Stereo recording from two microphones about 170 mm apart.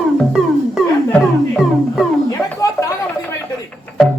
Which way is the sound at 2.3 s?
20° left (ahead or behind).